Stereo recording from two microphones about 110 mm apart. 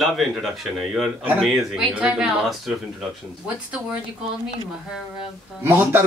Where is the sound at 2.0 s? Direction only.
10° right (ahead or behind).